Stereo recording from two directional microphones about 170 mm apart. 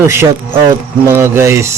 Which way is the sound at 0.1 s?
15° right (ahead or behind).